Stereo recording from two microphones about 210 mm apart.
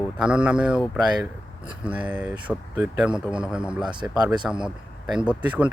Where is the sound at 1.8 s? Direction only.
5° right (ahead or behind).